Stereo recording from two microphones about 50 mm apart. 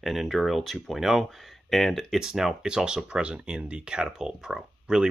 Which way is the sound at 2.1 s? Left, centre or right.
Centre.